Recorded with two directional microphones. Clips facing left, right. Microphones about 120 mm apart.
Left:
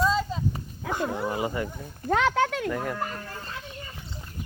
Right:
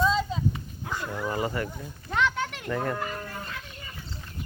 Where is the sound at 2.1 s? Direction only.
90° left.